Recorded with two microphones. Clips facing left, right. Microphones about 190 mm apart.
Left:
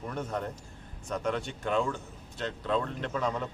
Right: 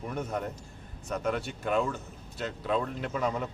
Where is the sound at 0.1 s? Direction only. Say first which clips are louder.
Right 1 dB; 10° right (ahead or behind).